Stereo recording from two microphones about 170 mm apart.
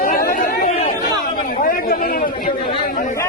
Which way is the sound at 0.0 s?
55° left (ahead or behind).